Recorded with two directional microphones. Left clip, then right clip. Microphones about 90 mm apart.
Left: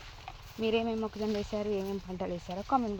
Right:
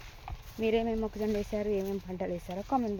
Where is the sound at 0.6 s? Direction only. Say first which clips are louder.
Right 1 dB; 15° right (ahead or behind).